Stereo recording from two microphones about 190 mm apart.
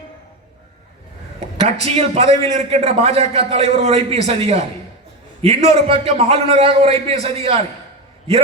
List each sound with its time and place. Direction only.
1.4 s a man's voice: 35° right (ahead or behind)